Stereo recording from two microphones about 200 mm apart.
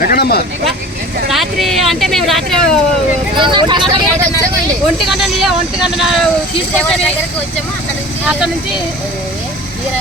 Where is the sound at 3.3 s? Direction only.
25° right (ahead or behind).